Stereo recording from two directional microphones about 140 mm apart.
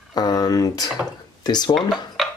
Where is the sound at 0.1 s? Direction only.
30° left (ahead or behind).